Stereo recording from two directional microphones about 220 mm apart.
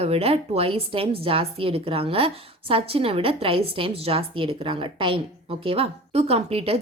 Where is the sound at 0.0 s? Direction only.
25° right (ahead or behind).